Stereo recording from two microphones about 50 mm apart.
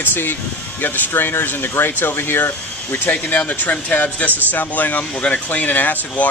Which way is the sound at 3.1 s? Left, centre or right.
Left.